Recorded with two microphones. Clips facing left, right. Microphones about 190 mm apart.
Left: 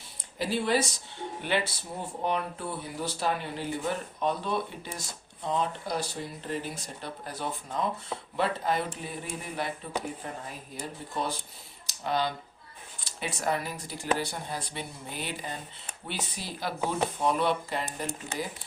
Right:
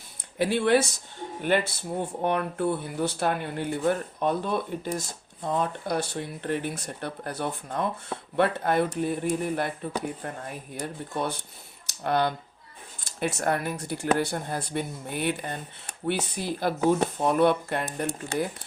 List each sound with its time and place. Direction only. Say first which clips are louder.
0.3 s speech: right 5 dB; 65° right (ahead or behind)
1.4 s speech: right 5 dB; 50° right (ahead or behind)